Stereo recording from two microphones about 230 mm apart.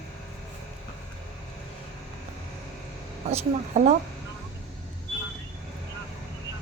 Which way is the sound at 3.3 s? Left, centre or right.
Right.